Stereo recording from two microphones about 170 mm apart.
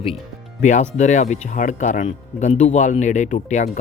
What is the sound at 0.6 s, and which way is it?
Speech, 45° left (ahead or behind).